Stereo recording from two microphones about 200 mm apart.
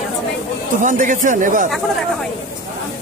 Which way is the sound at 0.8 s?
40° right (ahead or behind).